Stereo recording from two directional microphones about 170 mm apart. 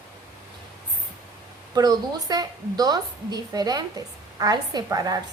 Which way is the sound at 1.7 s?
25° right (ahead or behind).